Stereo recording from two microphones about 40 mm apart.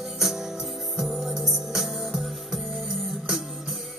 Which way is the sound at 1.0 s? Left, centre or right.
Centre.